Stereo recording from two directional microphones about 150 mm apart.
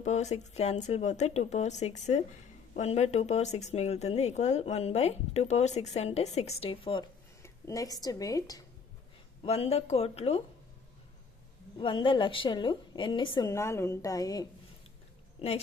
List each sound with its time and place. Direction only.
0.0 s speech: 50° left (ahead or behind)
7.4 s speech: 20° left (ahead or behind)
9.4 s speech: 40° left (ahead or behind)
11.8 s a woman's voice: 35° left (ahead or behind)
13.5 s a woman's voice: 20° left (ahead or behind)
15.4 s a woman's voice: 35° left (ahead or behind)